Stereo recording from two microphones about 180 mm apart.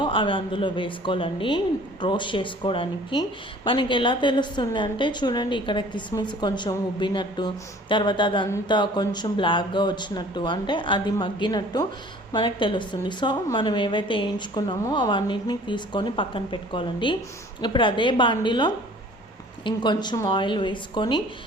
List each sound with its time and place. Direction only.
0.0 s a woman's voice: 30° left (ahead or behind)